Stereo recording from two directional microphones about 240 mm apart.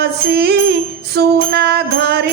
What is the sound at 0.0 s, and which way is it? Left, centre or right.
Music, right.